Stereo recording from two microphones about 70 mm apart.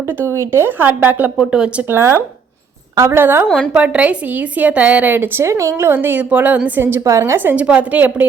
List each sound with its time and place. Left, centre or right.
0.3 s a woman's voice: right
1.4 s speech: centre
1.9 s a woman's voice: right
2.9 s a woman's voice: right
3.2 s a woman's voice: right
3.7 s a woman's voice: centre
5.4 s speech: right
5.9 s a woman's voice: right
7.0 s speech: right
7.5 s a woman's voice: centre